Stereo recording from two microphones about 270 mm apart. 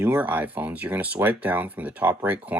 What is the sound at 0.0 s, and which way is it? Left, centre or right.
Speech, centre.